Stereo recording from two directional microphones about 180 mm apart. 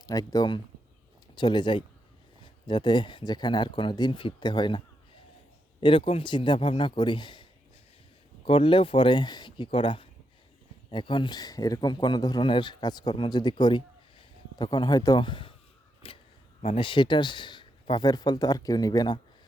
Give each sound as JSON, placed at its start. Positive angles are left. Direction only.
{"t": 0.0, "sound": "speech", "side_deg": 20}
{"t": 5.8, "sound": "speech", "side_deg": 30}
{"t": 8.4, "sound": "speech", "side_deg": 30}